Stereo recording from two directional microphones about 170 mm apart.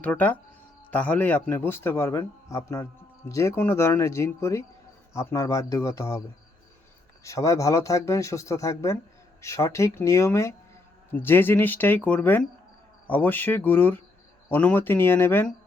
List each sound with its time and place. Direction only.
0.0 s speech: 10° left (ahead or behind)
7.3 s speech: 20° left (ahead or behind)